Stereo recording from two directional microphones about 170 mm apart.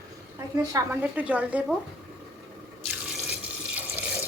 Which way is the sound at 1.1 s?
10° right (ahead or behind).